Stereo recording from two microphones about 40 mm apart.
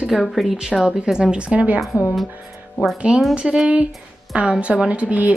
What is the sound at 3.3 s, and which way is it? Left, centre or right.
Speech, right.